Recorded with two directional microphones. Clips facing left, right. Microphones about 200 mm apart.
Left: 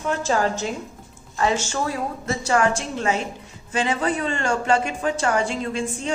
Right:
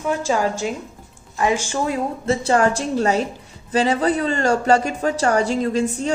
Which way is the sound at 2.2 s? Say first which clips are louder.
Right 3 dB; 30° right (ahead or behind).